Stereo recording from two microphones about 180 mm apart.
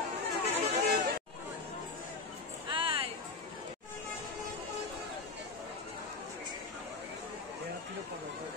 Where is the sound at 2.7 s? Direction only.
30° right (ahead or behind).